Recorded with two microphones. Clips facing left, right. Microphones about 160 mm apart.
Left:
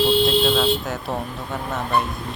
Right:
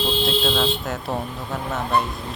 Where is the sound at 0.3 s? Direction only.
Centre (ahead or behind).